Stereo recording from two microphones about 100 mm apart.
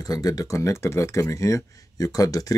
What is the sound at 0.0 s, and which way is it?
Speech, 40° left (ahead or behind).